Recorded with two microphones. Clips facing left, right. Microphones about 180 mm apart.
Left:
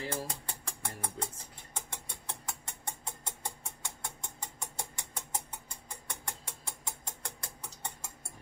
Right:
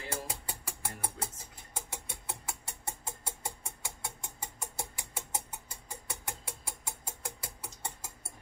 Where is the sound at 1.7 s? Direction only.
5° right (ahead or behind).